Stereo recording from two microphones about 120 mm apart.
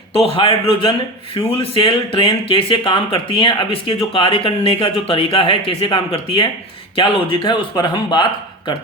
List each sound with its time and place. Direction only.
0.3 s speech: 50° left (ahead or behind)